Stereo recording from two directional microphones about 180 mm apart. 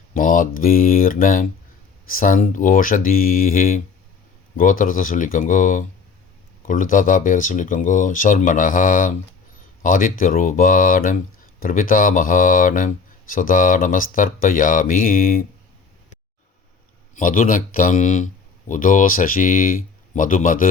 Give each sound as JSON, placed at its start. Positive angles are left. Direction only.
{"t": 0.1, "sound": "speech", "side_deg": 50}
{"t": 17.2, "sound": "speech", "side_deg": 50}